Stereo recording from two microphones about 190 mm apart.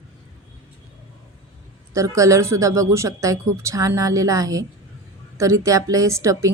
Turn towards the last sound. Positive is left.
turn(degrees=-15)  # may be behind; listen again after turning